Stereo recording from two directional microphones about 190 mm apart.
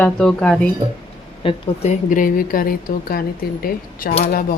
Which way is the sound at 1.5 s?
40° left (ahead or behind).